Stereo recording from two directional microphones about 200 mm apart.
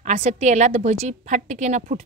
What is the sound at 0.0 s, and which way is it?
A woman's voice, 35° right (ahead or behind).